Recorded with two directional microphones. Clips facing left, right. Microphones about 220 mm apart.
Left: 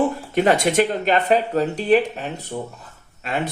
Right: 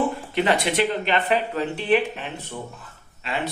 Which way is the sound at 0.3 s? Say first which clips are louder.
Left 5 dB; 45° left (ahead or behind).